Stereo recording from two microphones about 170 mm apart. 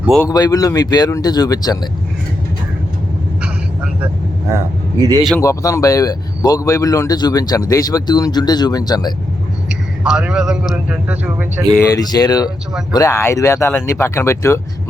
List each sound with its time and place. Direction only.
0.3 s speech: 20° left (ahead or behind)
4.0 s speech: 15° right (ahead or behind)
5.4 s speech: 20° left (ahead or behind)
9.6 s a man's voice: 5° right (ahead or behind)
11.9 s speech: 20° left (ahead or behind)